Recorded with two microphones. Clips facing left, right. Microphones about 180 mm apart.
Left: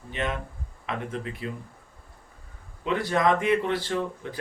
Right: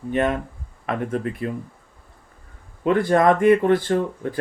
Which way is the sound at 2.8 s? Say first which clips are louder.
Right 7 dB; 50° right (ahead or behind).